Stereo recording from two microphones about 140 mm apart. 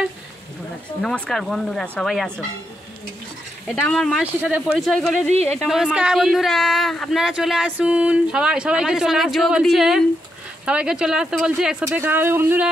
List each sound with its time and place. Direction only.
1.0 s speech: 5° left (ahead or behind)
3.8 s speech: 5° left (ahead or behind)
4.2 s speech: 10° right (ahead or behind)
4.7 s speech: centre (ahead or behind); by 12.6 s 15° right (ahead or behind)